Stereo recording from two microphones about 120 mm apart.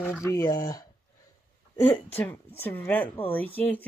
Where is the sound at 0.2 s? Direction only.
25° left (ahead or behind).